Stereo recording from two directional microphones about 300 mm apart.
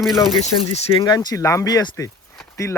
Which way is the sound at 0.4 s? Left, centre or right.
Centre.